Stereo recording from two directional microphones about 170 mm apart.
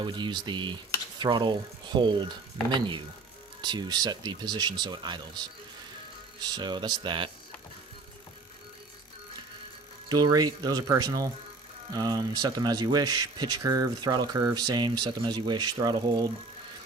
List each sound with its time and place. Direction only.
0.0 s speech: 25° right (ahead or behind)
6.4 s speech: 25° right (ahead or behind)
10.1 s speech: 25° right (ahead or behind)